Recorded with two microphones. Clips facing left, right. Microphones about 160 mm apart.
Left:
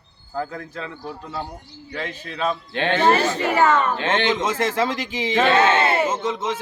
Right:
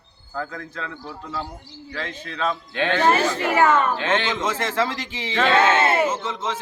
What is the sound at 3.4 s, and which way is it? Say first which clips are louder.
Speech: even; 5° right (ahead or behind).